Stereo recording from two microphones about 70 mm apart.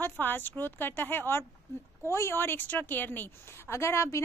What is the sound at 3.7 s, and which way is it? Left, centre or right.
Speech, left.